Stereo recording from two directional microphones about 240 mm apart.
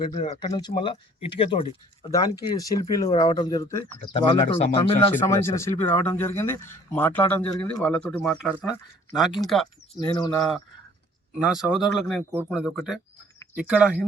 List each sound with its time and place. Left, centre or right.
0.0 s a man's voice: centre
10.0 s a man's voice: centre
11.3 s speech: centre